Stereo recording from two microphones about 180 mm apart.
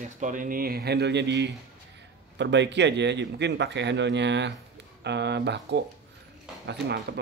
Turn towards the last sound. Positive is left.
turn(degrees=-70)  # may be behind; listen again after turning